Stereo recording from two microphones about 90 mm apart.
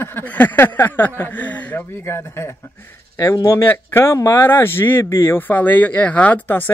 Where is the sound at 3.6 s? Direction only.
25° left (ahead or behind).